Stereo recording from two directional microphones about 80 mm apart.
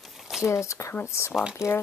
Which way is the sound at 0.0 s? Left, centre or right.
Centre.